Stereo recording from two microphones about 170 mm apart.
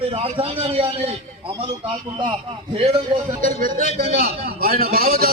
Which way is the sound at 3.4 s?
55° right (ahead or behind).